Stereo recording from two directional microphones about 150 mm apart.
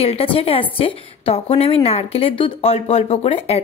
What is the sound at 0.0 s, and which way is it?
A woman's voice, 40° left (ahead or behind).